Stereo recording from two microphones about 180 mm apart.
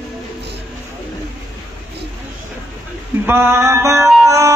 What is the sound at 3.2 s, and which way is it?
Music, 15° right (ahead or behind).